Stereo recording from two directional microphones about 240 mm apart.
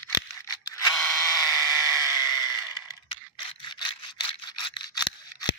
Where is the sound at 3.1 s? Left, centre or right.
Left.